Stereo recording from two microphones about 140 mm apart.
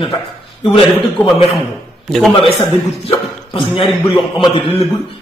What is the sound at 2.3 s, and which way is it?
Speech, 40° left (ahead or behind).